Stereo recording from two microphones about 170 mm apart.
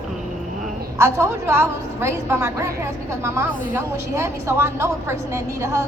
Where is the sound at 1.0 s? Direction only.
15° right (ahead or behind).